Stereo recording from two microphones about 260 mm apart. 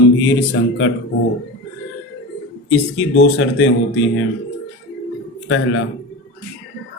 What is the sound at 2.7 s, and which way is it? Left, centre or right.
Speech, left.